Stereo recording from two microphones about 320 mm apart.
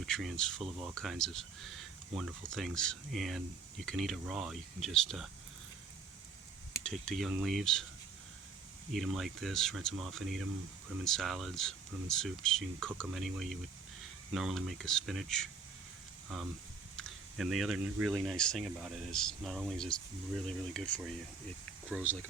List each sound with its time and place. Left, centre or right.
0.0 s speech: centre
6.9 s speech: centre
8.9 s speech: centre